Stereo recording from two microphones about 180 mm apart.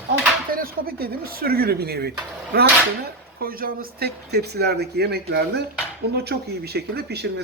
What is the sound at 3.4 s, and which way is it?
Speech, 55° right (ahead or behind).